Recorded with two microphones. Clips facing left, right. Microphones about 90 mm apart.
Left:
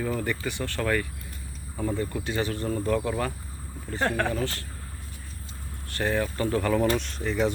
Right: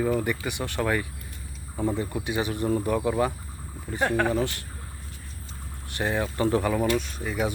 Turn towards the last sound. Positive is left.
turn(degrees=-10)  # may be behind; listen again after turning